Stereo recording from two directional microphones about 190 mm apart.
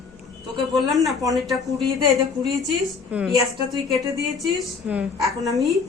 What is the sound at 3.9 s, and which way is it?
Speech, 15° right (ahead or behind).